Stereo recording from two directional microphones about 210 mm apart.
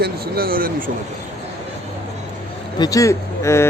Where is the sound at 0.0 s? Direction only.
45° right (ahead or behind).